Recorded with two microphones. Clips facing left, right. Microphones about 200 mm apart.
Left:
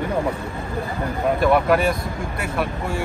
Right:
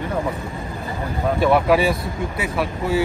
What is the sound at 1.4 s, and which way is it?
Speech, centre (ahead or behind).